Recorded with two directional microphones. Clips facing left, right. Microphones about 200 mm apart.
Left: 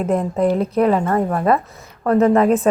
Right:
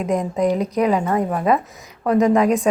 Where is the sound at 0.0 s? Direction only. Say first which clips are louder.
Left 2 dB; centre (ahead or behind).